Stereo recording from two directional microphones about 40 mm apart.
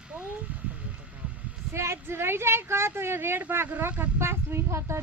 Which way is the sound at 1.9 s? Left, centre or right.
Right.